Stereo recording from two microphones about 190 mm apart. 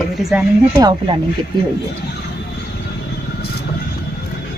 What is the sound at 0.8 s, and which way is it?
Speech, 20° right (ahead or behind).